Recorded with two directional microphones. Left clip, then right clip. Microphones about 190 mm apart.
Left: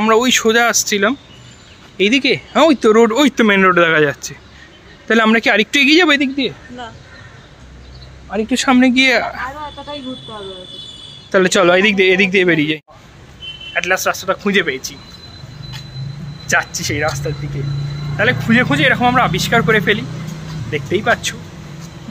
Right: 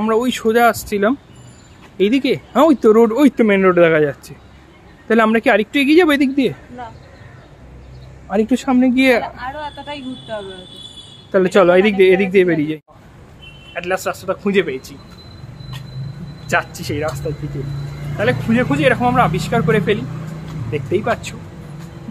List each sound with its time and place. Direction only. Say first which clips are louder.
0.0 s speech: left 5 dB; 5° right (ahead or behind)
6.0 s speech: left 1 dB; 25° right (ahead or behind)
8.3 s speech: right 3 dB; 30° right (ahead or behind)
8.6 s speech: left 4 dB; centre (ahead or behind)
11.3 s speech: even; centre (ahead or behind)
16.4 s speech: left 3 dB; 10° right (ahead or behind)